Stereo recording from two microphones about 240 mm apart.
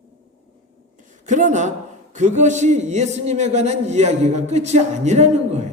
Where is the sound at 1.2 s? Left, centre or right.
Right.